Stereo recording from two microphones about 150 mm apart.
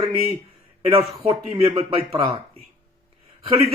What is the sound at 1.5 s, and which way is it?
Speech, 40° right (ahead or behind).